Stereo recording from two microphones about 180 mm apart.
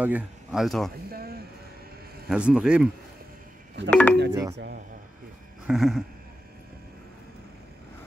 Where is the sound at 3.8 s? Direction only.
10° left (ahead or behind).